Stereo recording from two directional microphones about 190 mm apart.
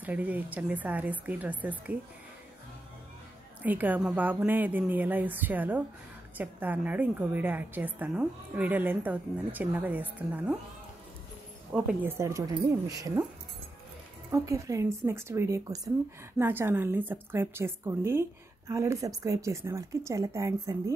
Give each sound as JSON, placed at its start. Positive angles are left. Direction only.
{"t": 0.0, "sound": "a woman's voice", "side_deg": -10}
{"t": 3.6, "sound": "a woman's voice", "side_deg": -10}
{"t": 11.7, "sound": "a woman's voice", "side_deg": -5}
{"t": 14.3, "sound": "a woman's voice", "side_deg": -15}